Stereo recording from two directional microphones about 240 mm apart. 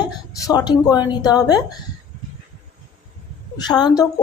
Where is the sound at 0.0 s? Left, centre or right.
Centre.